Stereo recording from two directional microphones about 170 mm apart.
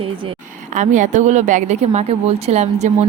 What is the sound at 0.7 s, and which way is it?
Speech, 45° right (ahead or behind).